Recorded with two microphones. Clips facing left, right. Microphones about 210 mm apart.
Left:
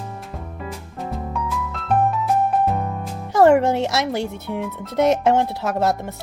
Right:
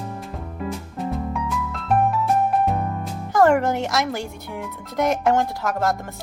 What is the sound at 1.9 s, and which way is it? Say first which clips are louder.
Music: even; centre (ahead or behind).